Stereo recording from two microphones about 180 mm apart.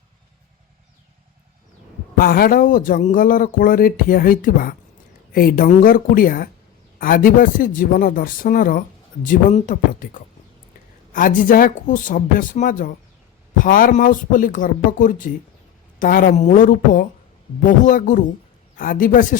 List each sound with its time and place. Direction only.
2.1 s speech: 55° left (ahead or behind)